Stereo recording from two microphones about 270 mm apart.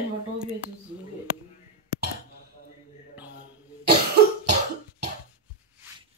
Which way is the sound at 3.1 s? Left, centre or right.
Centre.